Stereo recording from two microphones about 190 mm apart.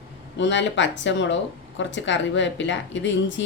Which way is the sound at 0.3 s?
70° left (ahead or behind).